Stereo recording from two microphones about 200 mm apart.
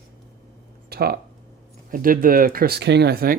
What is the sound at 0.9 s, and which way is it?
Speech, 50° right (ahead or behind).